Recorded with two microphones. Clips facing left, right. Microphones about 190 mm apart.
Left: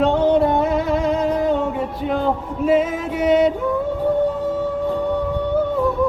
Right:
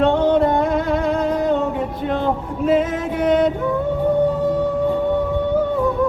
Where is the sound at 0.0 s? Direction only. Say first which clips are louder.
Even; 5° left (ahead or behind).